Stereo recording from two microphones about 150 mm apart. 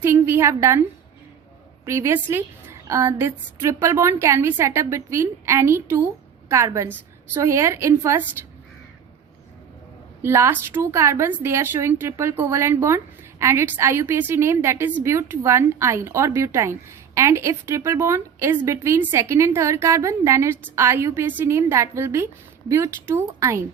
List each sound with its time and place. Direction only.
0.0 s a woman's voice: 15° right (ahead or behind)
10.2 s a woman's voice: 15° right (ahead or behind)